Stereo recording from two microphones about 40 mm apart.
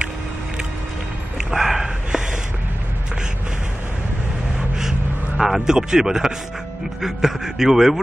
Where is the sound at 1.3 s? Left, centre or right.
Centre.